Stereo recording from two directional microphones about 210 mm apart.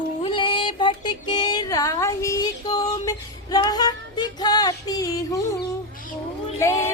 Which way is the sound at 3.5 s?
20° left (ahead or behind).